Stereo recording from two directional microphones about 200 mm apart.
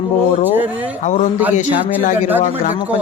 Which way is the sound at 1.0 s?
35° left (ahead or behind).